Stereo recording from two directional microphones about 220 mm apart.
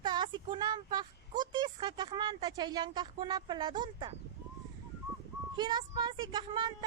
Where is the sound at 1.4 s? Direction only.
20° right (ahead or behind).